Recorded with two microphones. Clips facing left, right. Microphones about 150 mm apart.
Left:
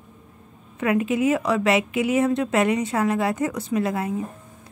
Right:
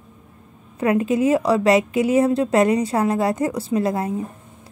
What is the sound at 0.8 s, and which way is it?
A woman's voice, 35° right (ahead or behind).